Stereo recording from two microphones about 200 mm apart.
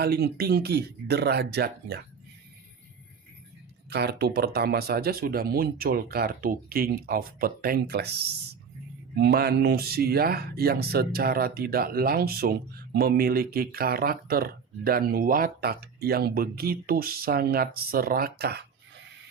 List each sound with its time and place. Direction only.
0.0 s speech: 50° right (ahead or behind)
3.8 s speech: 55° right (ahead or behind)